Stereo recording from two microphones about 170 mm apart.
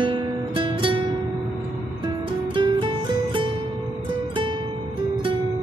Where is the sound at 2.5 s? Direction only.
30° right (ahead or behind).